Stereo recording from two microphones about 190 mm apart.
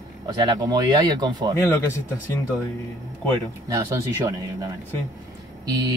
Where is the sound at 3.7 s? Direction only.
15° right (ahead or behind).